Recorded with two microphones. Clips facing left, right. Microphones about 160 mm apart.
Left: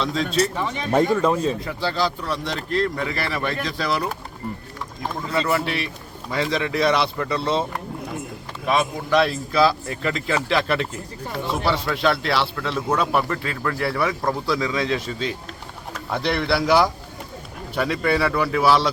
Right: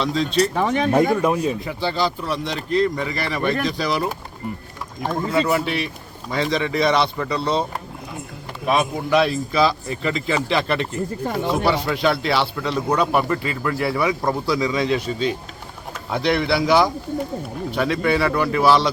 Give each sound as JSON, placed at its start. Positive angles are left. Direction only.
{"t": 0.0, "sound": "speech", "side_deg": 0}
{"t": 0.6, "sound": "speech", "side_deg": -55}
{"t": 0.9, "sound": "a man's voice", "side_deg": -10}
{"t": 1.6, "sound": "speech", "side_deg": 0}
{"t": 5.2, "sound": "speech", "side_deg": -5}
{"t": 8.6, "sound": "speech", "side_deg": -10}